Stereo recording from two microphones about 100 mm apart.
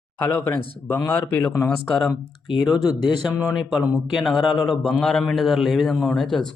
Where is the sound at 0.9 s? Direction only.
20° left (ahead or behind).